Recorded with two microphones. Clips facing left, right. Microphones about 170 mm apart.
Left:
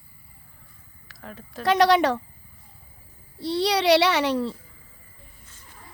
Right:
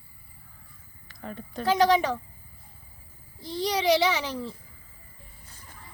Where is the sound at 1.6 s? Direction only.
75° left (ahead or behind).